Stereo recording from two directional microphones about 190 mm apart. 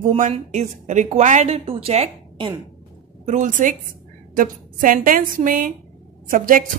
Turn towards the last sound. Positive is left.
turn(degrees=-45)  # may be behind; listen again after turning